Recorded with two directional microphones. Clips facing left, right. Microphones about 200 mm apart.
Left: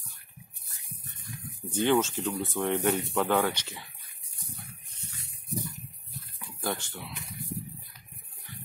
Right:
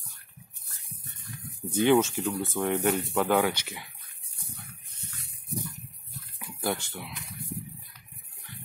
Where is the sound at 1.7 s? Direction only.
15° right (ahead or behind).